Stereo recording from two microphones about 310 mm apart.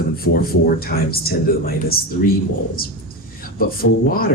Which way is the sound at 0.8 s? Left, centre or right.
Left.